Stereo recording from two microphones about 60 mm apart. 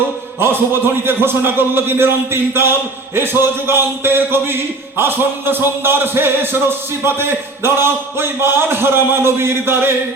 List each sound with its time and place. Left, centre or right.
0.3 s a man's voice: right